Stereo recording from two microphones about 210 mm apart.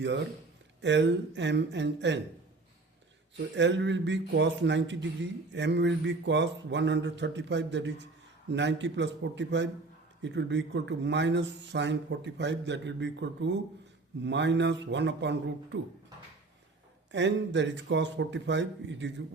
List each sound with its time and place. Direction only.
0.8 s speech: 55° right (ahead or behind)
3.5 s speech: 60° right (ahead or behind)
17.1 s speech: 60° right (ahead or behind)